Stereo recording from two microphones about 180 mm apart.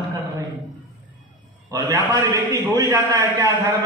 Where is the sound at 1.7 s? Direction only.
20° right (ahead or behind).